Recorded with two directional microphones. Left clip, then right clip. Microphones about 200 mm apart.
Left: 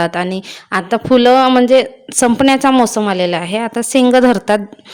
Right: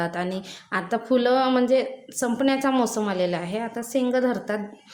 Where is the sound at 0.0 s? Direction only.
40° left (ahead or behind).